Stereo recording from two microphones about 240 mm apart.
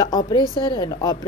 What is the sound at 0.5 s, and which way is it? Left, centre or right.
Speech, centre.